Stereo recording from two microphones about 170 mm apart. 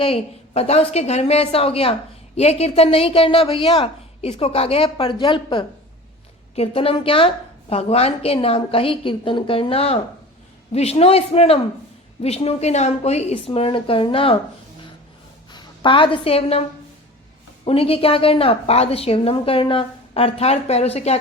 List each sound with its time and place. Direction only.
0.0 s a woman's voice: 35° left (ahead or behind)
15.5 s a woman's voice: 30° left (ahead or behind)
17.7 s a woman's voice: 35° left (ahead or behind)